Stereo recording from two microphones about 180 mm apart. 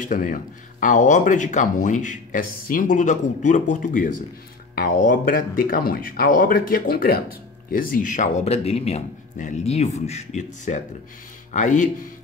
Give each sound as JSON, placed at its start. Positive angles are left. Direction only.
{"t": 0.0, "sound": "speech", "side_deg": 50}